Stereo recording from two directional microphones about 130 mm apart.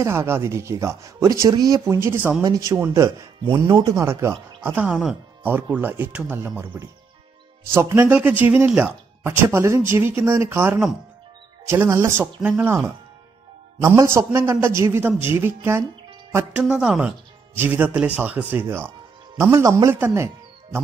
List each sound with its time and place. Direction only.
0.0 s speech: 20° right (ahead or behind)
2.4 s speech: 30° right (ahead or behind)